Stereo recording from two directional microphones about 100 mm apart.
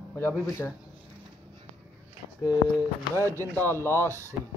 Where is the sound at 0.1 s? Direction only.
25° left (ahead or behind).